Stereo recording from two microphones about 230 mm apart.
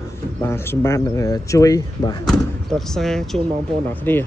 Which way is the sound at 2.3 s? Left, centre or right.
Centre.